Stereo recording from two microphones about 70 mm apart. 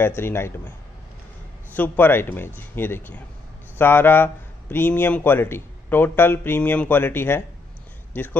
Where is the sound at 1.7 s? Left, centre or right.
Left.